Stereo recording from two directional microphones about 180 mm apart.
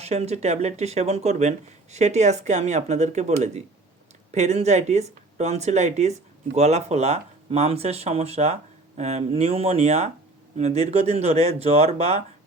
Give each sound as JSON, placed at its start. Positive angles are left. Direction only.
{"t": 0.0, "sound": "speech", "side_deg": -35}